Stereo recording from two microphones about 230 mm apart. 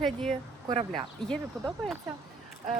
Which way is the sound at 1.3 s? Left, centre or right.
Centre.